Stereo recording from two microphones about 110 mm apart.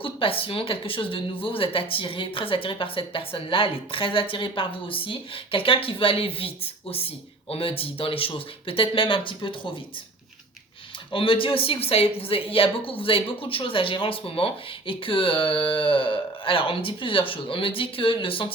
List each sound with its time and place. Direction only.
0.0 s speech: 55° left (ahead or behind)
7.5 s speech: 55° left (ahead or behind)
11.1 s speech: 55° left (ahead or behind)